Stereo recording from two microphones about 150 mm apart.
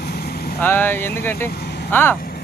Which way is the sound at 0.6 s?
15° left (ahead or behind).